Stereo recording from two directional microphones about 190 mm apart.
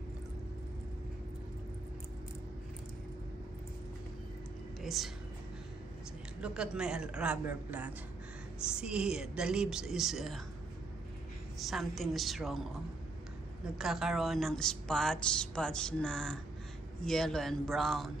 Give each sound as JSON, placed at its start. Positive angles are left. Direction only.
{"t": 4.8, "sound": "a woman's voice", "side_deg": 0}
{"t": 6.4, "sound": "speech", "side_deg": -5}
{"t": 11.6, "sound": "speech", "side_deg": 0}
{"t": 13.7, "sound": "speech", "side_deg": 0}